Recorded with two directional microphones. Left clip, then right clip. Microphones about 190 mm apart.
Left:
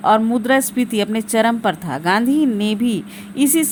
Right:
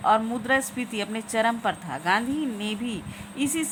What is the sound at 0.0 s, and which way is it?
A woman's voice, 30° left (ahead or behind).